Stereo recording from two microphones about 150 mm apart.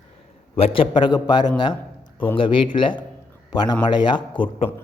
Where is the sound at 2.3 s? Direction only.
35° left (ahead or behind).